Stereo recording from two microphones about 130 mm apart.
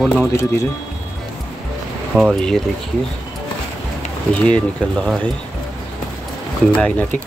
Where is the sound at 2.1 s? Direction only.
Centre (ahead or behind).